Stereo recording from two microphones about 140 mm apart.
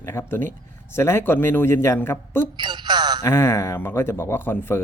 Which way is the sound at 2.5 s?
30° right (ahead or behind).